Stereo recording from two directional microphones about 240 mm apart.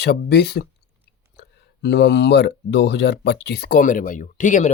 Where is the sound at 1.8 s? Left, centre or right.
Left.